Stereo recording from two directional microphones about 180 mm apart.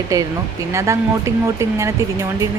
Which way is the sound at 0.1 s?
15° right (ahead or behind).